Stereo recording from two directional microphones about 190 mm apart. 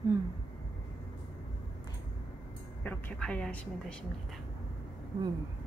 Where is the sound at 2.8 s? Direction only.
10° left (ahead or behind).